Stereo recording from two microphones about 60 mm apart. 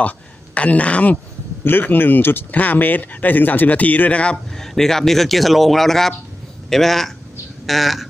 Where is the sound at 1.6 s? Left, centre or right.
Left; by 4.4 s centre.